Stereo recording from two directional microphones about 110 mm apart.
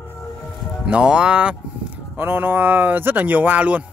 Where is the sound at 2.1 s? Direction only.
20° right (ahead or behind).